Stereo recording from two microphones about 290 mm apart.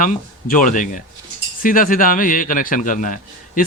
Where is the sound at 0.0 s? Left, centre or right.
Left.